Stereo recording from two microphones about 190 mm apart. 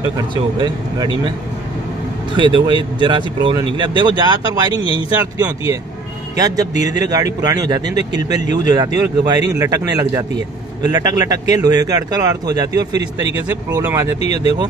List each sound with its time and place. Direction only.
0.3 s speech: 25° right (ahead or behind)
2.3 s speech: 25° right (ahead or behind)
6.3 s speech: 20° right (ahead or behind)